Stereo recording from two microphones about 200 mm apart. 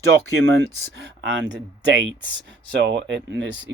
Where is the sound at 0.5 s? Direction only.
60° right (ahead or behind).